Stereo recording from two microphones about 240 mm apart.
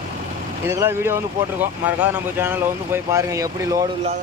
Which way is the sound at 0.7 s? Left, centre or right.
Centre.